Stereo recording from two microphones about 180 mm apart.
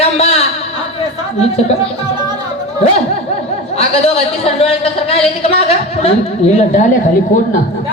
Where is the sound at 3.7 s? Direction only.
35° left (ahead or behind).